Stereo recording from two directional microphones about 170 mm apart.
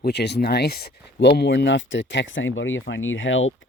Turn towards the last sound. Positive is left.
turn(degrees=90)